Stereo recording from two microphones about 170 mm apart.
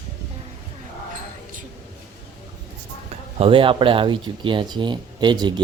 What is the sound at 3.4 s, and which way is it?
Speech, 30° right (ahead or behind).